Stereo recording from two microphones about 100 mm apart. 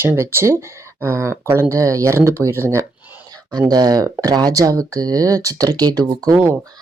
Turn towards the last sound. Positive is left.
turn(degrees=-40)  # may be behind; listen again after turning